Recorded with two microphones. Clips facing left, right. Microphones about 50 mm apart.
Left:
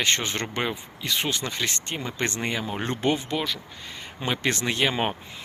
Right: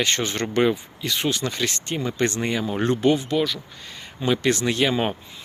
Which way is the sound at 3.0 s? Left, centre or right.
Left.